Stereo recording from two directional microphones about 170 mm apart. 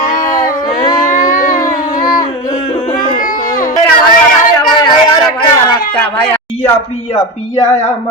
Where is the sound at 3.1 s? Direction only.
50° left (ahead or behind).